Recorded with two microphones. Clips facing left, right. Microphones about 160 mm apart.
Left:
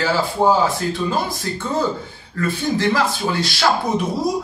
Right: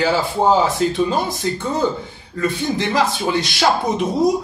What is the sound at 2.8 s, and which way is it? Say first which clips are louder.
Speech: right 1 dB; 20° right (ahead or behind).